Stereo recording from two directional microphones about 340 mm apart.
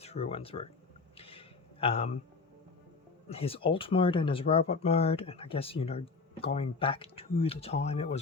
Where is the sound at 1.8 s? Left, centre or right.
Centre.